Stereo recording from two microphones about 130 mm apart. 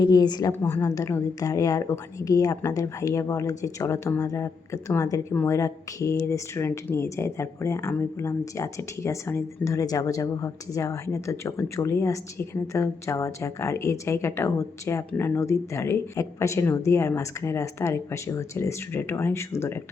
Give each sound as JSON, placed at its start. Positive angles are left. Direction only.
{"t": 0.0, "sound": "a woman's voice", "side_deg": 35}
{"t": 5.3, "sound": "speech", "side_deg": 15}
{"t": 5.5, "sound": "speech", "side_deg": 25}